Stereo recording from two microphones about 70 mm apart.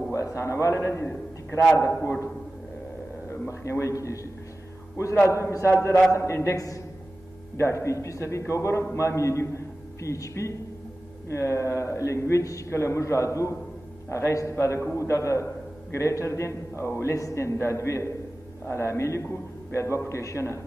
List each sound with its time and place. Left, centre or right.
0.1 s a man's voice: left
3.3 s a man's voice: left